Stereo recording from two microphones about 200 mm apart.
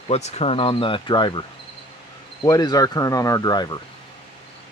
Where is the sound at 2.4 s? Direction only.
20° left (ahead or behind).